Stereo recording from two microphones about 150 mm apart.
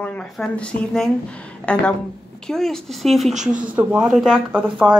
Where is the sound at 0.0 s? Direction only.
10° left (ahead or behind).